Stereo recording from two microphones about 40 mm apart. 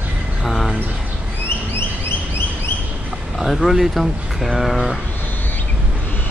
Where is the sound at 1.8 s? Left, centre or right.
Left.